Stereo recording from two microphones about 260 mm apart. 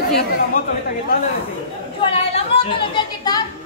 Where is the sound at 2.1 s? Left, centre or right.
Left.